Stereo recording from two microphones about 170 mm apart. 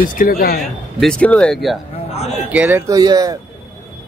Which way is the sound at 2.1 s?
40° left (ahead or behind).